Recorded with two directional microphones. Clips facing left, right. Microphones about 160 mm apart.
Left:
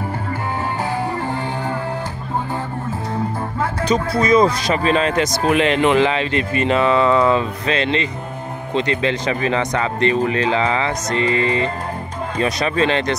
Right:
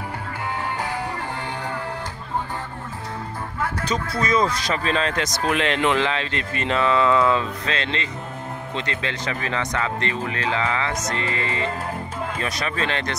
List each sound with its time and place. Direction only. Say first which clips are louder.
3.8 s speech: left 9 dB; 15° left (ahead or behind)